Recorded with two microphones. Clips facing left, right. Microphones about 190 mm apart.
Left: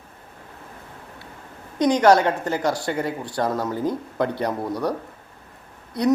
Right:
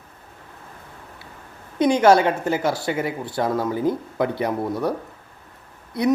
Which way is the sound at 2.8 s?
20° right (ahead or behind).